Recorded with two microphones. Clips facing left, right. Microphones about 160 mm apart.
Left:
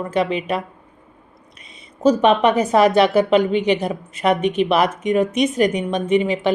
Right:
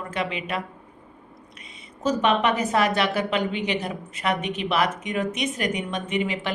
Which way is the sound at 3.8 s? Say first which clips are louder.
Left 8 dB; 40° left (ahead or behind).